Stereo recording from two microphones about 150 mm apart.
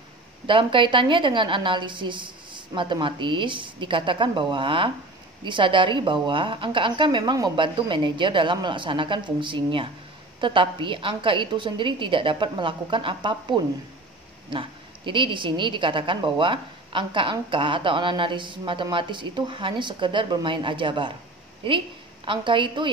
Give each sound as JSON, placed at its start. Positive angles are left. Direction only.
{"t": 0.5, "sound": "a woman's voice", "side_deg": -35}